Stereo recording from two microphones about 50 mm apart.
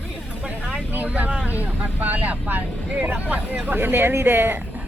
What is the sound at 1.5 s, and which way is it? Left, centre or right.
Speech, right.